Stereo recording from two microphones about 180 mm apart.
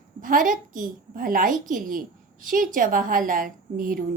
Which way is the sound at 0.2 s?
50° right (ahead or behind).